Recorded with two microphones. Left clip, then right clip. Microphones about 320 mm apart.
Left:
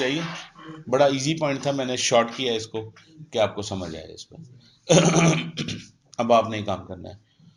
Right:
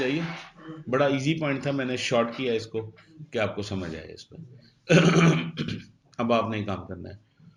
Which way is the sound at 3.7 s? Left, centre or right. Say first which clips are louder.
Left 2 dB; centre.